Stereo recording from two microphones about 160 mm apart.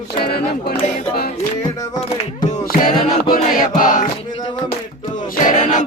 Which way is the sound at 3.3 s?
60° left (ahead or behind).